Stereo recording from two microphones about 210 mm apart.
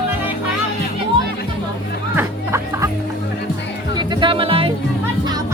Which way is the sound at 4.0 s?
20° right (ahead or behind).